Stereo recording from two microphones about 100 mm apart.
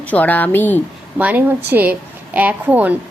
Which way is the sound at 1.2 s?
15° right (ahead or behind).